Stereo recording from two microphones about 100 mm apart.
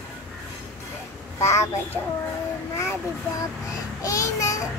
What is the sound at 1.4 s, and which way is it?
Speech, 30° left (ahead or behind).